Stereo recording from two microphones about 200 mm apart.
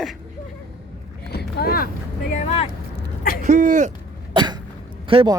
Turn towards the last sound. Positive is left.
turn(degrees=-25)  # may be behind; listen again after turning